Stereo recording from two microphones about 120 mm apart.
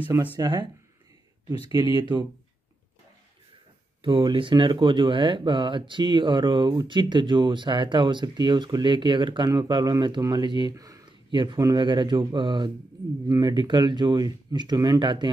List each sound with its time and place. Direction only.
0.4 s speech: 40° right (ahead or behind)
2.0 s speech: 40° right (ahead or behind)
4.0 s speech: 45° right (ahead or behind)
11.2 s speech: 40° right (ahead or behind)